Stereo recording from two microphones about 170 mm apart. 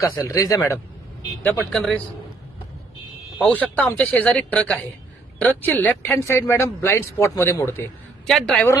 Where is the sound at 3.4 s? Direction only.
10° left (ahead or behind).